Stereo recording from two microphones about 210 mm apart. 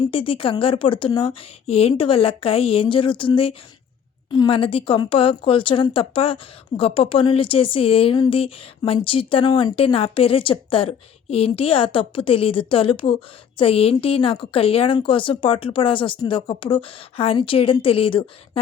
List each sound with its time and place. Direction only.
0.1 s a woman's voice: 25° left (ahead or behind)